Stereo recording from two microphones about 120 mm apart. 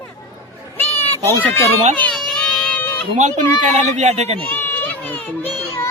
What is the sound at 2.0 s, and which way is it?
Baby cry, 5° left (ahead or behind).